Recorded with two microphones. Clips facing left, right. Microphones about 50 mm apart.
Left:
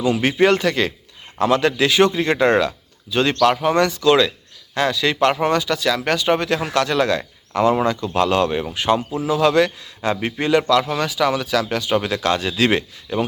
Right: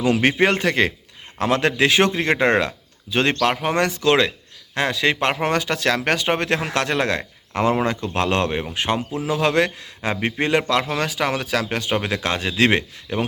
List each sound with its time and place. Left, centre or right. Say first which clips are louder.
0.1 s speech: left 2 dB; right
10.1 s speech: left 2 dB; right